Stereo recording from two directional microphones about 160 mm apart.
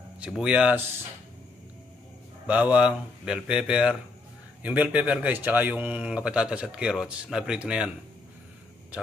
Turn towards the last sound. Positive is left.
turn(degrees=-5)  # may be behind; listen again after turning